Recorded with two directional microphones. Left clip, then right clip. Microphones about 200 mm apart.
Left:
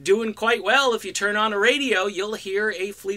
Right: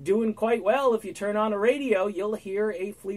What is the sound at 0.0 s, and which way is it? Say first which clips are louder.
Speech: left 4 dB; 10° left (ahead or behind).